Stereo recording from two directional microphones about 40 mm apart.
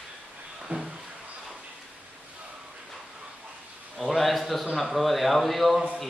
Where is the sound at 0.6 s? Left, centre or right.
Centre.